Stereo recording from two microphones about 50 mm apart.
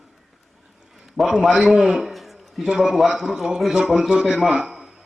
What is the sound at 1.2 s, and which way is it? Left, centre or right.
Speech, centre.